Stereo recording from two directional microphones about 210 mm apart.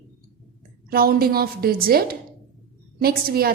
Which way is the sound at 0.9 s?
45° right (ahead or behind).